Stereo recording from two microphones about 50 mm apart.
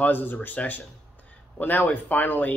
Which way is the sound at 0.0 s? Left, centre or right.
Left.